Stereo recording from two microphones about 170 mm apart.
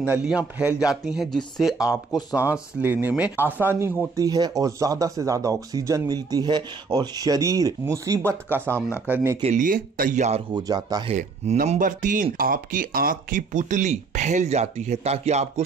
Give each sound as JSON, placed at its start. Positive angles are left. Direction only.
{"t": 0.0, "sound": "speech", "side_deg": -5}
{"t": 9.4, "sound": "speech", "side_deg": -45}
{"t": 10.5, "sound": "speech", "side_deg": -25}
{"t": 11.1, "sound": "speech", "side_deg": -45}